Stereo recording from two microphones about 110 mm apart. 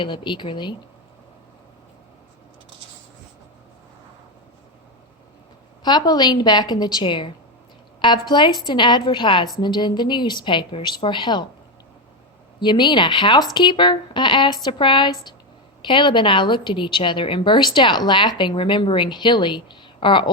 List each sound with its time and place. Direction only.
0.0 s a woman's voice: 45° left (ahead or behind)
5.8 s a woman's voice: 40° left (ahead or behind)
12.5 s a woman's voice: 45° left (ahead or behind)